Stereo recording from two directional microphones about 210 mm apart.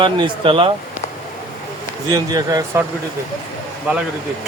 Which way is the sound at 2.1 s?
15° right (ahead or behind).